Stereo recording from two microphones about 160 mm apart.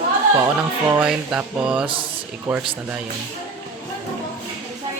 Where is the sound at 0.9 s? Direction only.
10° right (ahead or behind).